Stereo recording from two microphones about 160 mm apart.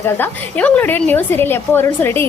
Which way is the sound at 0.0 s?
10° left (ahead or behind).